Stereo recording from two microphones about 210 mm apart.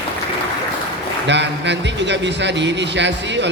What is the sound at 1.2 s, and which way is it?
A man's voice, 55° right (ahead or behind).